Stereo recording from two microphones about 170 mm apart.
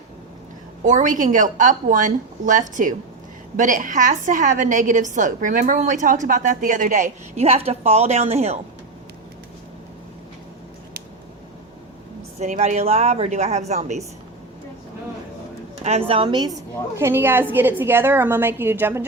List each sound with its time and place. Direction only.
0.9 s a woman's voice: 50° right (ahead or behind)
12.4 s speech: 40° right (ahead or behind)
15.8 s speech: 35° right (ahead or behind)
17.0 s a woman's voice: 15° right (ahead or behind)